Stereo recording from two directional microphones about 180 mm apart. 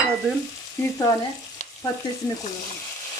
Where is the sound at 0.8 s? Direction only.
15° left (ahead or behind).